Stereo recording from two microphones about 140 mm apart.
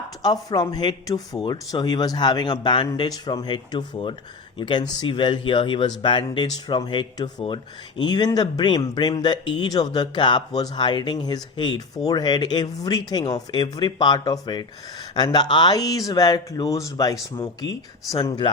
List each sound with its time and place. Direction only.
0.2 s speech: 30° left (ahead or behind)